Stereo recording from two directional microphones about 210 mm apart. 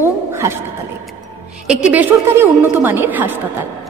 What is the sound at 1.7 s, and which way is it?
A woman's voice, 5° right (ahead or behind).